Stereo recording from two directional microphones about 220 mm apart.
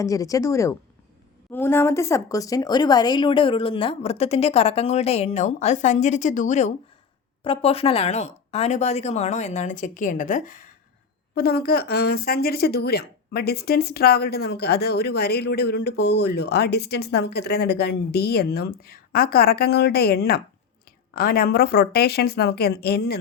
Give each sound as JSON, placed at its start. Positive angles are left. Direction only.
{"t": 0.0, "sound": "a woman's voice", "side_deg": 15}